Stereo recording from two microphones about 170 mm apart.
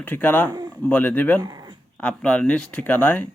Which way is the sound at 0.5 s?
20° right (ahead or behind).